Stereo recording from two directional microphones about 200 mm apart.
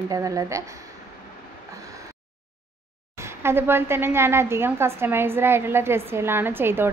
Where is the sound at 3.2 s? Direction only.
10° right (ahead or behind).